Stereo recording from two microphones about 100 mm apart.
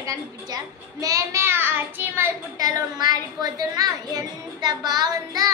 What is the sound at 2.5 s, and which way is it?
A child's voice, 40° right (ahead or behind).